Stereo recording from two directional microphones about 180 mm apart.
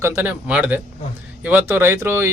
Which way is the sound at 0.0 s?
10° right (ahead or behind).